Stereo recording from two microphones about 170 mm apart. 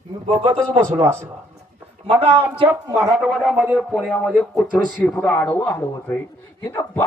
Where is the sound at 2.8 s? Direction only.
20° right (ahead or behind).